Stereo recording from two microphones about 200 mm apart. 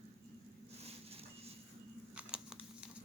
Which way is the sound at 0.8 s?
30° right (ahead or behind).